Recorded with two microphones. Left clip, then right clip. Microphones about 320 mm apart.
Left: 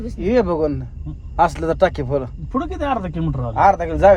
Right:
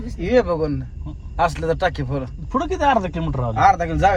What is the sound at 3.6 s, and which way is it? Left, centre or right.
Speech, left.